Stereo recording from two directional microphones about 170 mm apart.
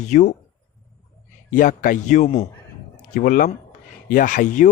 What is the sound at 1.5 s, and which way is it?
A man's voice, 50° left (ahead or behind).